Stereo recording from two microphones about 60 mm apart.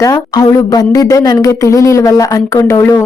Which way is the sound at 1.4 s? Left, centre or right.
Left.